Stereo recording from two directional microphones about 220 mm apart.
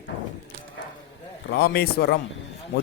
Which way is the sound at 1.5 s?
45° left (ahead or behind).